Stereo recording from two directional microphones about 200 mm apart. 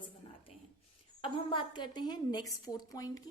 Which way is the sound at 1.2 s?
25° left (ahead or behind).